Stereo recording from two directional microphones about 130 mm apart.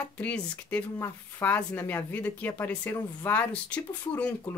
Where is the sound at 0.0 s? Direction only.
10° left (ahead or behind).